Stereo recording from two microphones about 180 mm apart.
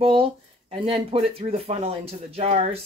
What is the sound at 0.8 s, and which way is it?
Speech, 35° right (ahead or behind).